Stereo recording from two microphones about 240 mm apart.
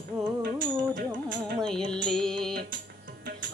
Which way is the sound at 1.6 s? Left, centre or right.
Centre.